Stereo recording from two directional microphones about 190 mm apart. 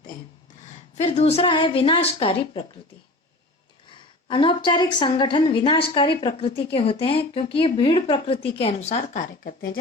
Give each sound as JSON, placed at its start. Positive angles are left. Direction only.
{"t": 1.0, "sound": "a woman's voice", "side_deg": 35}
{"t": 4.3, "sound": "a woman's voice", "side_deg": 25}